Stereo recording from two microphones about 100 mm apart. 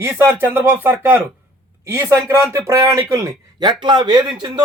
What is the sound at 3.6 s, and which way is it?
Speech, 55° right (ahead or behind).